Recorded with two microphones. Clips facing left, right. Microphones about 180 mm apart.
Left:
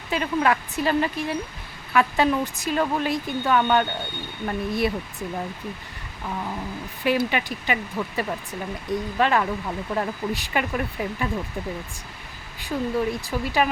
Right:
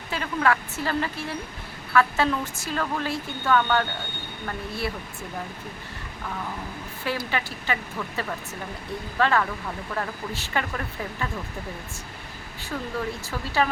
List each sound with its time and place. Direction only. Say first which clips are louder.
0.1 s speech: left 2 dB; 20° left (ahead or behind)
7.0 s speech: left 6 dB; 15° left (ahead or behind)
12.6 s speech: left 6 dB; 15° left (ahead or behind)